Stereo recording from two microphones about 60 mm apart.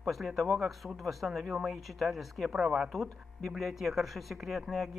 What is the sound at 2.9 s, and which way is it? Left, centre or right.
Speech, centre.